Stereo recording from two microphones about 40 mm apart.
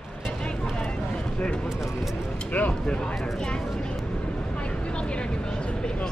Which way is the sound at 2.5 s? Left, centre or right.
Left.